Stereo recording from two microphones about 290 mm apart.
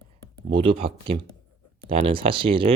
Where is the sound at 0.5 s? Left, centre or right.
Centre.